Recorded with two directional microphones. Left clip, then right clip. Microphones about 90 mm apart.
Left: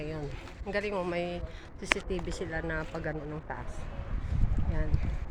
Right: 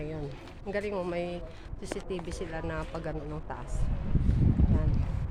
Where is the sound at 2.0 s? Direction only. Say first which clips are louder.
Left 1 dB; 40° left (ahead or behind).